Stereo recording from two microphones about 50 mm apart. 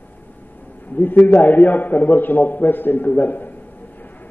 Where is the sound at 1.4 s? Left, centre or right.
Left.